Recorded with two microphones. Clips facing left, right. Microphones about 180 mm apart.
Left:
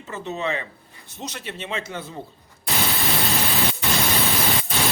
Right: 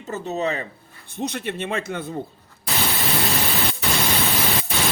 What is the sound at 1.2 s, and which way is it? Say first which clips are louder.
Speech: right 7 dB; 55° right (ahead or behind).